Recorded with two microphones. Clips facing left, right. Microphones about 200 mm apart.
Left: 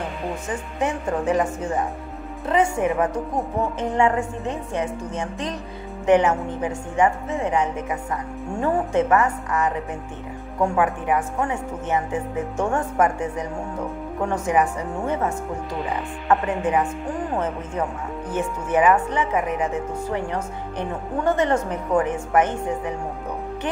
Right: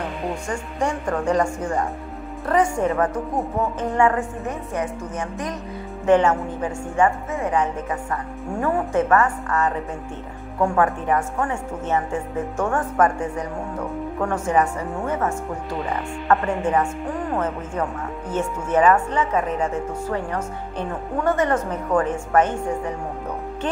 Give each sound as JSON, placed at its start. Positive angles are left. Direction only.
{"t": 0.7, "sound": "speech", "side_deg": 20}
{"t": 2.4, "sound": "speech", "side_deg": 25}
{"t": 6.0, "sound": "speech", "side_deg": 15}
{"t": 18.3, "sound": "speech", "side_deg": 15}